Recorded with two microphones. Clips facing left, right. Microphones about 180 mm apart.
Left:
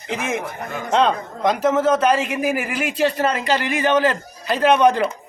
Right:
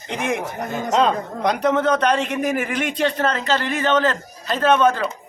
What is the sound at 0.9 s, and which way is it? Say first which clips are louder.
A man's voice: left 1 dB; centre (ahead or behind).